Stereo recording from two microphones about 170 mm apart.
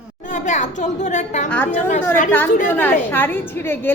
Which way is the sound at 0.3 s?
45° left (ahead or behind).